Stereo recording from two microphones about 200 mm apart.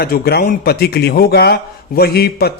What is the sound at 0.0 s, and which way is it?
A man's voice, 50° left (ahead or behind).